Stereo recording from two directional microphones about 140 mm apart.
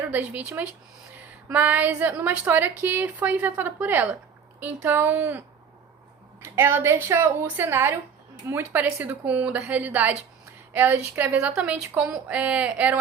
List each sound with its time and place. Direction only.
0.1 s a woman's voice: 10° right (ahead or behind)
6.4 s a woman's voice: 15° right (ahead or behind)